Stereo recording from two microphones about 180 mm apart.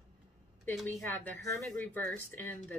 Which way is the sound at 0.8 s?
10° left (ahead or behind).